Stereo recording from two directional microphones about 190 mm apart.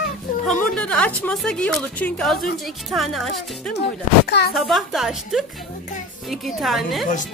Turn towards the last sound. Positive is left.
turn(degrees=0)  # may be behind; listen again after turning